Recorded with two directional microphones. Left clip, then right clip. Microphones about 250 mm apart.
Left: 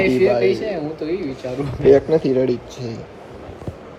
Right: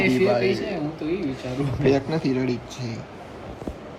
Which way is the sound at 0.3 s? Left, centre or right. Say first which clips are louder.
Left 5 dB; centre.